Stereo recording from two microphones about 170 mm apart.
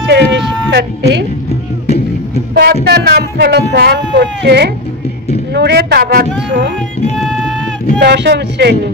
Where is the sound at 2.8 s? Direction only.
70° right (ahead or behind).